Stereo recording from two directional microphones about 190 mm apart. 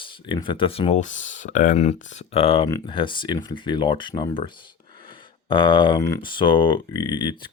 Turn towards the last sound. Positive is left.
turn(degrees=25)  # may be behind; listen again after turning